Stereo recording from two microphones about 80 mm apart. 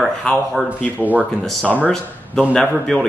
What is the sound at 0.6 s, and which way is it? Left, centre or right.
Speech, centre.